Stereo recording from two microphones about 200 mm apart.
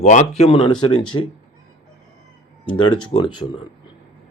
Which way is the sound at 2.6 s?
25° left (ahead or behind).